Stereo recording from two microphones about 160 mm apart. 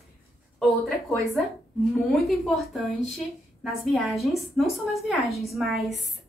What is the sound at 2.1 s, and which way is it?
Speech, centre (ahead or behind).